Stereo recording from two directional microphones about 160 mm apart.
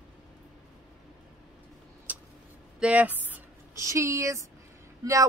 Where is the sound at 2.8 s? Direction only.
10° right (ahead or behind).